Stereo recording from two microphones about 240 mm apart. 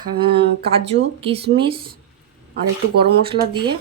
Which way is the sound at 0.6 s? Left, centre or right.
Right.